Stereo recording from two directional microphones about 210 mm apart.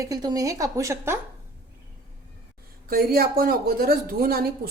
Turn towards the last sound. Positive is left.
turn(degrees=-45)  # may be behind; listen again after turning